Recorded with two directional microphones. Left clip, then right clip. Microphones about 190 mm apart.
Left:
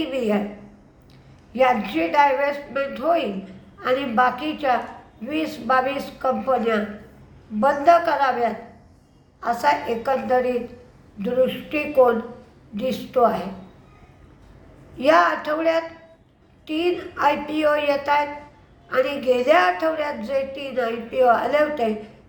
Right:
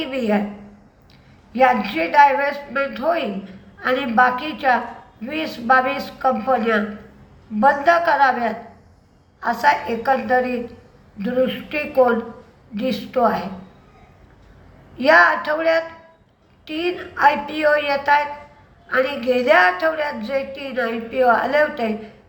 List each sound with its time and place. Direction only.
0.0 s a woman's voice: 15° left (ahead or behind)
1.5 s speech: 15° left (ahead or behind)
14.9 s speech: 15° left (ahead or behind)